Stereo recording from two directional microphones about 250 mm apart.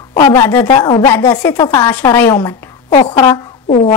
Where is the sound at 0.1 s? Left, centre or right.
Centre.